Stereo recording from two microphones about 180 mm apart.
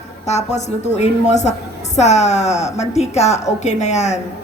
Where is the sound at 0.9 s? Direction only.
40° left (ahead or behind).